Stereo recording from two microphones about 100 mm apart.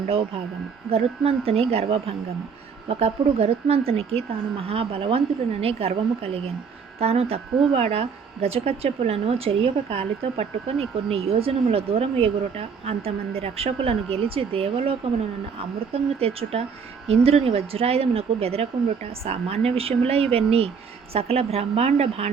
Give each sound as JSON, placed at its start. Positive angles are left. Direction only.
{"t": 0.9, "sound": "speech", "side_deg": -80}
{"t": 7.0, "sound": "a woman's voice", "side_deg": -85}